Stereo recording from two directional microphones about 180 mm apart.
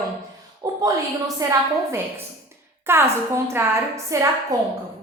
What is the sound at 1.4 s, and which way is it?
A woman's voice, 15° right (ahead or behind).